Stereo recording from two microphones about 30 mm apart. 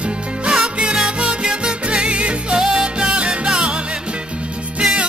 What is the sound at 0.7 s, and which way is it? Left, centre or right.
Music, right.